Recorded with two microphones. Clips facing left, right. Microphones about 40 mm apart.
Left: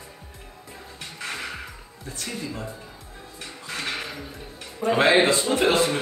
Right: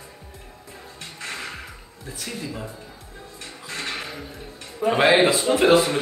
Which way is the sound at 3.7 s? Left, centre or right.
Centre.